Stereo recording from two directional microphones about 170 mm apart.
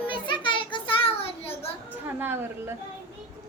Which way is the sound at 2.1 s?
10° right (ahead or behind).